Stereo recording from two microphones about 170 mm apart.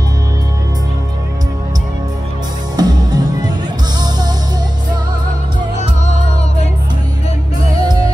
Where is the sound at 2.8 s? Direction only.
25° right (ahead or behind).